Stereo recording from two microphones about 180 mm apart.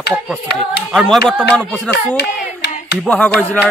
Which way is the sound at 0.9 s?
Centre (ahead or behind).